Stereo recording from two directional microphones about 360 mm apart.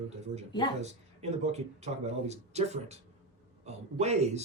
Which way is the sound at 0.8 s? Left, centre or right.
Centre.